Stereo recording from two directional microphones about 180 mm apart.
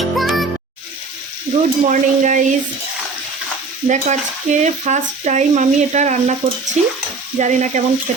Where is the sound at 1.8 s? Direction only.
45° right (ahead or behind).